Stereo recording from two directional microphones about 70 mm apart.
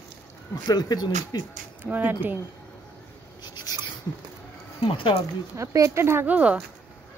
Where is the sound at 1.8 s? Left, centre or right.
Right.